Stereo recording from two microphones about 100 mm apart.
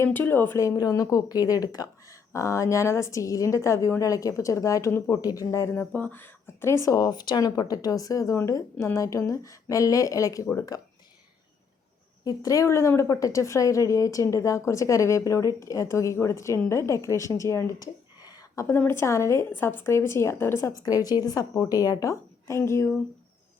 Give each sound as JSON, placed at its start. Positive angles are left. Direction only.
{"t": 0.0, "sound": "speech", "side_deg": 20}
{"t": 5.8, "sound": "speech", "side_deg": 15}
{"t": 12.2, "sound": "a woman's voice", "side_deg": 35}
{"t": 18.2, "sound": "a sound", "side_deg": 40}
{"t": 18.9, "sound": "a woman's voice", "side_deg": 25}